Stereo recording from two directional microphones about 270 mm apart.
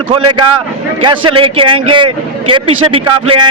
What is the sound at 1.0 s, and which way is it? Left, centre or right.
A man's voice, centre.